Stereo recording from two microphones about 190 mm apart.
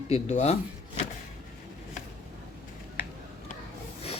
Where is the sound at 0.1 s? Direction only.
35° left (ahead or behind).